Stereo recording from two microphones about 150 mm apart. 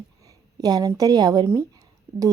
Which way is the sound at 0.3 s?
25° right (ahead or behind).